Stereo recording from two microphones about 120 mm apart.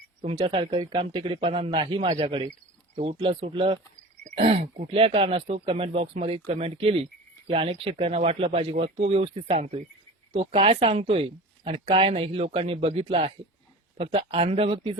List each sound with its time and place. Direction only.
0.2 s speech: 50° right (ahead or behind)
4.4 s speech: 60° right (ahead or behind)
4.9 s speech: 50° right (ahead or behind)